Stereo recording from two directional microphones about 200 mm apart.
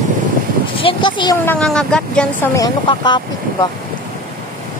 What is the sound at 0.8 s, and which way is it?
Speech, 25° left (ahead or behind).